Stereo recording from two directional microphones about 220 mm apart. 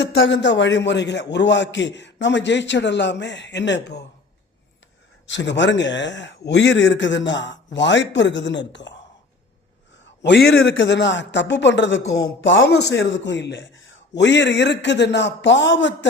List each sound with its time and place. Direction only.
0.1 s a man's voice: 55° left (ahead or behind)
5.2 s a man's voice: 55° left (ahead or behind)
10.2 s a man's voice: 50° left (ahead or behind)